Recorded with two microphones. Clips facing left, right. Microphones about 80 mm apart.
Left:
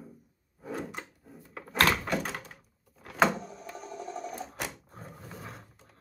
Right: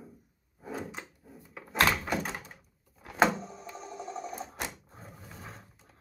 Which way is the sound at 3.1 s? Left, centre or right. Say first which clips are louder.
Even; centre.